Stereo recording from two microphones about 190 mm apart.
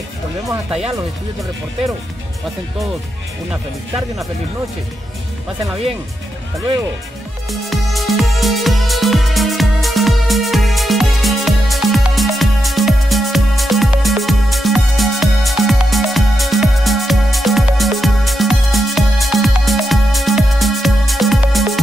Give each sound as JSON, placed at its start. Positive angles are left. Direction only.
{"t": 0.7, "sound": "speech", "side_deg": -5}
{"t": 7.5, "sound": "music", "side_deg": 0}